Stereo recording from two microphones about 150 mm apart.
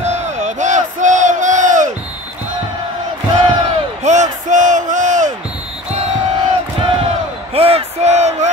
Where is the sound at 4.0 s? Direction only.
55° right (ahead or behind).